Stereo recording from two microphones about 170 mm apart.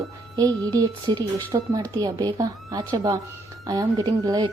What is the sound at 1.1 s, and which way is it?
Speech, 25° right (ahead or behind).